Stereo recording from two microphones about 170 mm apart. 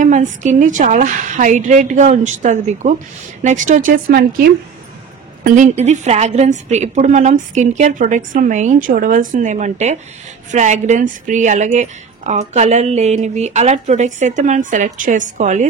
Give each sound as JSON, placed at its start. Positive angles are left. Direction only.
{"t": 0.0, "sound": "a woman's voice", "side_deg": -45}
{"t": 5.4, "sound": "a woman's voice", "side_deg": -45}